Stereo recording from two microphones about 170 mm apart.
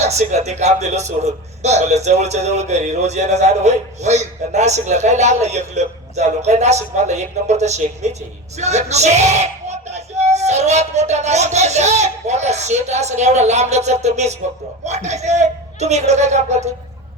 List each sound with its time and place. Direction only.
0.0 s a man's voice: 40° right (ahead or behind)